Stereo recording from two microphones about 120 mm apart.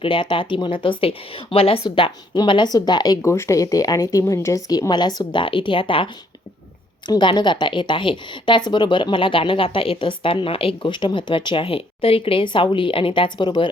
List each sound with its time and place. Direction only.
0.0 s speech: 45° left (ahead or behind)
2.4 s speech: 35° left (ahead or behind)
7.1 s speech: 40° left (ahead or behind)